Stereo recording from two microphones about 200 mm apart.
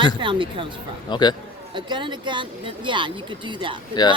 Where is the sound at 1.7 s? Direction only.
20° right (ahead or behind).